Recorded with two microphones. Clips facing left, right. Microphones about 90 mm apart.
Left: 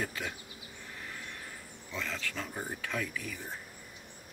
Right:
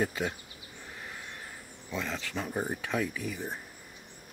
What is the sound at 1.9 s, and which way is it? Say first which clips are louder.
Speech: right 3 dB; 20° right (ahead or behind).